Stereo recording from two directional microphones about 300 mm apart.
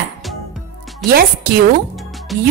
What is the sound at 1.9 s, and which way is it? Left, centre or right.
Music, centre.